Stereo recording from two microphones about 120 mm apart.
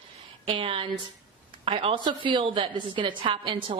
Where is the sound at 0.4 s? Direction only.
50° right (ahead or behind).